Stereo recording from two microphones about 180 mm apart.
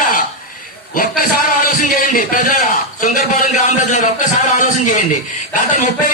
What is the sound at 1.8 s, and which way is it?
A man's voice, 50° left (ahead or behind).